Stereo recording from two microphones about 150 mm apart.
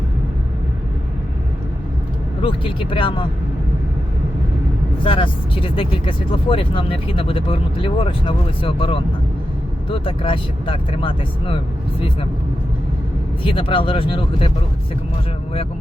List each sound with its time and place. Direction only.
2.4 s speech: 35° left (ahead or behind)
5.0 s speech: 35° left (ahead or behind)
13.4 s speech: 35° left (ahead or behind)